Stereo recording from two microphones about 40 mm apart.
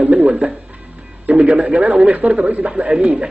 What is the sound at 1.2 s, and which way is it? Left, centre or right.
A man's voice, right.